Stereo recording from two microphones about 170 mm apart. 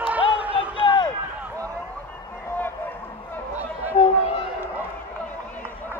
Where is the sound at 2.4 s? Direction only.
10° left (ahead or behind).